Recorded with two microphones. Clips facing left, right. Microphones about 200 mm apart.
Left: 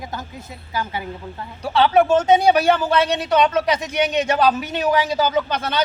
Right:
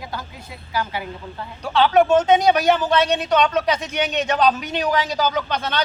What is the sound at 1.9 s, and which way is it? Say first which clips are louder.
A man's voice: even; 10° left (ahead or behind).